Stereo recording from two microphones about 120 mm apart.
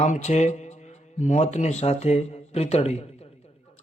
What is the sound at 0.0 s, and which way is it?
Speech, 70° left (ahead or behind).